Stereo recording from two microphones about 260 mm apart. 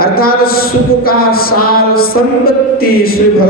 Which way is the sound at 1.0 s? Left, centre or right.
Left.